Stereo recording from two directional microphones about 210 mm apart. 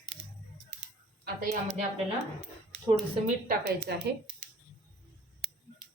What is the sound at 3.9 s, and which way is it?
Speech, 50° right (ahead or behind).